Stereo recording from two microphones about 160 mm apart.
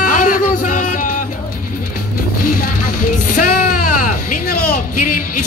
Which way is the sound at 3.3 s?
60° left (ahead or behind).